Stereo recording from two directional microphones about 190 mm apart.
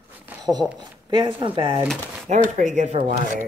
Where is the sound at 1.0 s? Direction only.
25° right (ahead or behind).